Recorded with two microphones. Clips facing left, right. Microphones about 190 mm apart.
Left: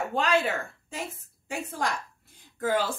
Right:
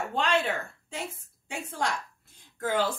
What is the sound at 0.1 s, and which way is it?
Speech, centre (ahead or behind).